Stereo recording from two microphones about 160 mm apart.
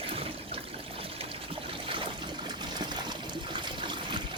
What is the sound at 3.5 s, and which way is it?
Trickle, 30° right (ahead or behind).